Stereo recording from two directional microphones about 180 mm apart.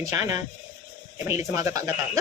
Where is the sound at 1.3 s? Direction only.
15° right (ahead or behind).